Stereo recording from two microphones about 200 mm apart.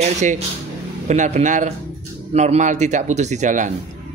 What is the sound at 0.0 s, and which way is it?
A man's voice, 35° right (ahead or behind).